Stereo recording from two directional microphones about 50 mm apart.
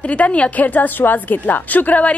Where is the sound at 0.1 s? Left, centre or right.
Left.